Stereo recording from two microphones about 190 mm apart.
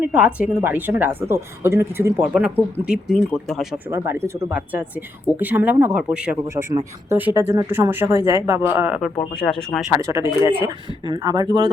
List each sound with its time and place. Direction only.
0.0 s speech: 5° right (ahead or behind)
3.9 s speech: 15° right (ahead or behind)
9.0 s speech: centre (ahead or behind)
10.0 s speech: 15° right (ahead or behind)